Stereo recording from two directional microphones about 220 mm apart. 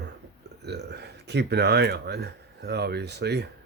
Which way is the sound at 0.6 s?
50° right (ahead or behind).